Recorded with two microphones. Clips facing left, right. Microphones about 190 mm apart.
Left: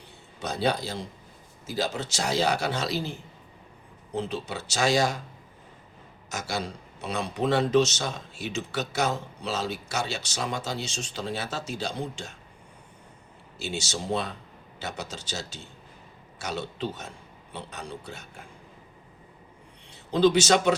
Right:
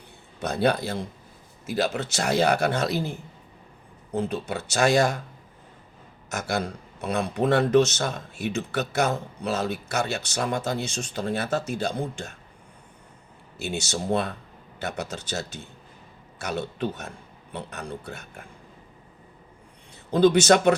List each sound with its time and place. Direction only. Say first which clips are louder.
0.3 s a man's voice: right 4 dB; 55° right (ahead or behind)
6.3 s a man's voice: right 4 dB; 55° right (ahead or behind)
13.6 s a man's voice: right 3 dB; 55° right (ahead or behind)
20.1 s a man's voice: right 3 dB; 55° right (ahead or behind)